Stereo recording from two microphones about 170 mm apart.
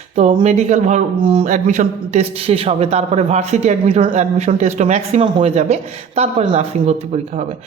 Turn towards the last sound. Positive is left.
turn(degrees=-30)  # may be behind; listen again after turning